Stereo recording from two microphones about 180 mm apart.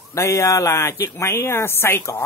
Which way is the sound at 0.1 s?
15° left (ahead or behind).